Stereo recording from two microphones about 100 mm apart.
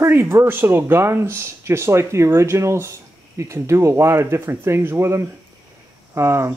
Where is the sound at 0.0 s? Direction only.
25° right (ahead or behind).